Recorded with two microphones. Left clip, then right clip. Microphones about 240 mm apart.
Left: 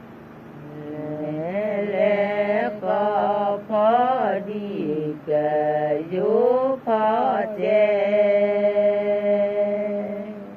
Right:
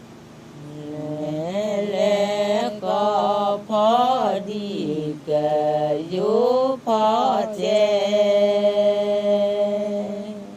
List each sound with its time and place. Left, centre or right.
1.5 s mantra: right